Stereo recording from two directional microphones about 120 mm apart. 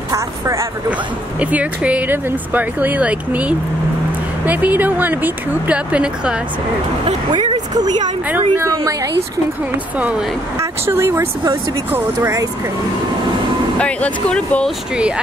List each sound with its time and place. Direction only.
0.1 s a sound: 25° right (ahead or behind)
1.4 s speech: 10° right (ahead or behind)
7.7 s speech: 35° right (ahead or behind)
8.3 s speech: 20° right (ahead or behind)
8.7 s speech: 30° right (ahead or behind)
10.6 s speech: 20° right (ahead or behind)
13.7 s speech: 10° left (ahead or behind)